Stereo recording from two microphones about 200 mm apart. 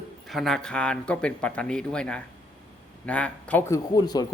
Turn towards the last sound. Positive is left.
turn(degrees=20)  # may be behind; listen again after turning